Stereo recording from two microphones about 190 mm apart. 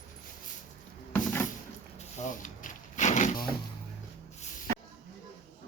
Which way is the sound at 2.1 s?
40° left (ahead or behind).